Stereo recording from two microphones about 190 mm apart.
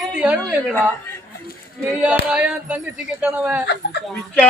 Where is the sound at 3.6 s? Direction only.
60° left (ahead or behind).